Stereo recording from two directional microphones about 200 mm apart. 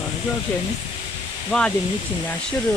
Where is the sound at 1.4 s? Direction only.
5° left (ahead or behind).